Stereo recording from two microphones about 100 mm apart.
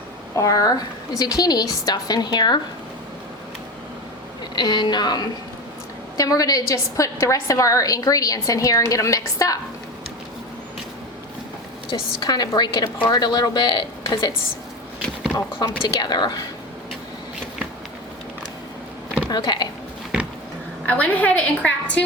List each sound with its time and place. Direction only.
0.3 s a woman's voice: 35° left (ahead or behind)
4.5 s a woman's voice: 45° left (ahead or behind)
11.9 s a woman's voice: 45° left (ahead or behind)
15.8 s a woman's voice: 45° left (ahead or behind)
19.3 s speech: 45° left (ahead or behind)
20.8 s a woman's voice: 15° left (ahead or behind)